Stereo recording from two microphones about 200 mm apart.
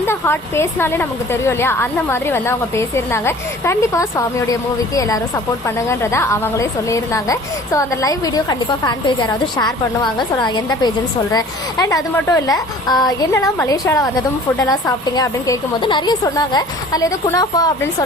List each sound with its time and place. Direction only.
0.1 s a woman's voice: 10° left (ahead or behind)